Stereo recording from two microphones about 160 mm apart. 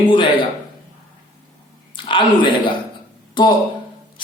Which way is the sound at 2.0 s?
30° left (ahead or behind).